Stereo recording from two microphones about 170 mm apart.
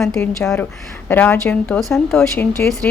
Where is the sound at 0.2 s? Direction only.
5° left (ahead or behind).